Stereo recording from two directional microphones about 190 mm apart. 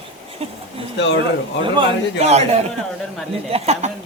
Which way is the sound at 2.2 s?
35° right (ahead or behind).